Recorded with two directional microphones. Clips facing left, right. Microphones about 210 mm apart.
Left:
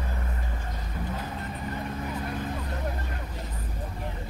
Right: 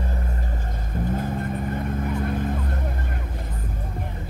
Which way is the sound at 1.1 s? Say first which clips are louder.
Right 8 dB; 50° right (ahead or behind).